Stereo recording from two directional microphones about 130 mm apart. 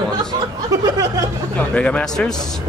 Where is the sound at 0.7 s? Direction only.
25° right (ahead or behind).